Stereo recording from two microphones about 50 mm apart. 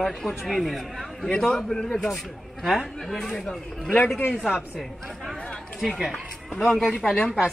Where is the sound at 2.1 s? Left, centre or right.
Centre.